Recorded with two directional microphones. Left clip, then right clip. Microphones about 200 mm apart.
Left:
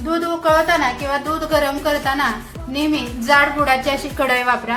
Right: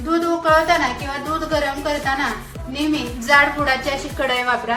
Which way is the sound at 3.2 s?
15° left (ahead or behind).